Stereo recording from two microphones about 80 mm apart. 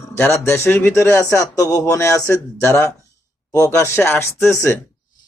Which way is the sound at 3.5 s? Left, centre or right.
Left.